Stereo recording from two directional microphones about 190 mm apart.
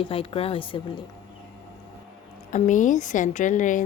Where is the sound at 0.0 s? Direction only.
30° left (ahead or behind).